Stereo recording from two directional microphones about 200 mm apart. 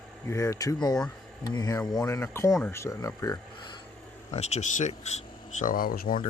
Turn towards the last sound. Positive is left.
turn(degrees=45)  # may be behind; listen again after turning